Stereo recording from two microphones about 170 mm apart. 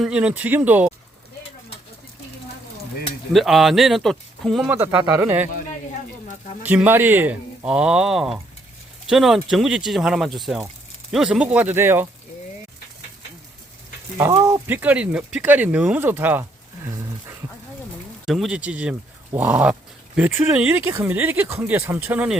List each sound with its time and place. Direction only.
0.0 s speech: 5° right (ahead or behind)
3.3 s speech: centre (ahead or behind)
4.7 s speech: 10° right (ahead or behind)
6.6 s speech: 10° right (ahead or behind)
14.2 s speech: 20° right (ahead or behind)
18.3 s speech: 5° right (ahead or behind)